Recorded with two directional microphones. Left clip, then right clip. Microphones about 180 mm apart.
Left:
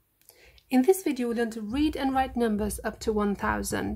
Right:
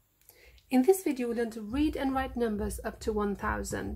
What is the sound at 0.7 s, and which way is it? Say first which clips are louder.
A woman's voice: left 2 dB; 10° left (ahead or behind).